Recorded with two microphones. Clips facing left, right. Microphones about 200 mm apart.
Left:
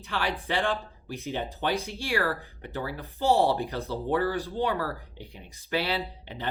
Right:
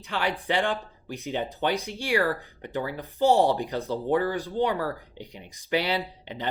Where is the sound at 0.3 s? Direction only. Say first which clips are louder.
Right 2 dB; 15° right (ahead or behind).